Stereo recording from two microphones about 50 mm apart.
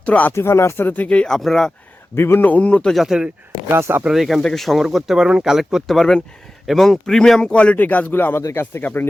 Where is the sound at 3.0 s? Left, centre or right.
Centre.